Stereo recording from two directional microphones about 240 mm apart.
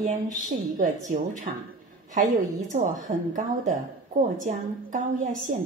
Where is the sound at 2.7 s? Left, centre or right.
Right.